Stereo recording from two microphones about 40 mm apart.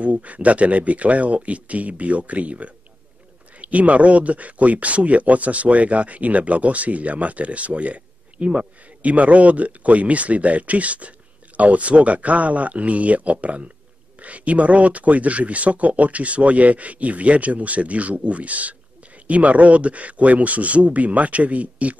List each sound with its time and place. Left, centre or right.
0.0 s speech: right